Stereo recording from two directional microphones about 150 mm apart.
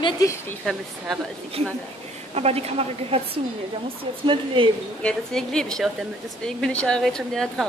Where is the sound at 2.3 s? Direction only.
45° right (ahead or behind).